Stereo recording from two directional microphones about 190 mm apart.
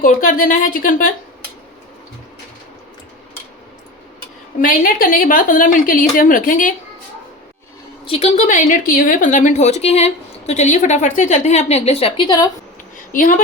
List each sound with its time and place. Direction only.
0.0 s a woman's voice: 45° left (ahead or behind)
4.6 s a woman's voice: 50° left (ahead or behind)
8.0 s a woman's voice: 30° left (ahead or behind)
13.1 s a woman's voice: 45° left (ahead or behind)